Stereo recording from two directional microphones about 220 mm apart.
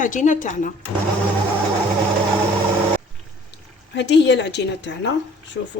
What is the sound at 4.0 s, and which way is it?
A woman's voice, 50° left (ahead or behind).